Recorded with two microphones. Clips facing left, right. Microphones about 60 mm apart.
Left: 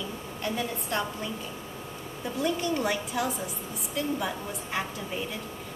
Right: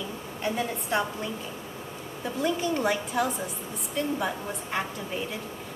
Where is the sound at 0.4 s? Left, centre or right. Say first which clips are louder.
Right 2 dB; centre.